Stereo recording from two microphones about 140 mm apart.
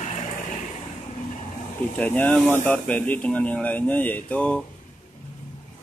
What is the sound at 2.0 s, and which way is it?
Speech, 10° left (ahead or behind).